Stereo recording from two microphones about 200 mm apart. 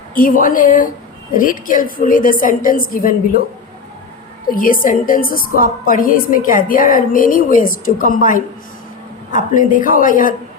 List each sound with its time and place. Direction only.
0.1 s a woman's voice: 45° left (ahead or behind)
4.4 s a woman's voice: 45° left (ahead or behind)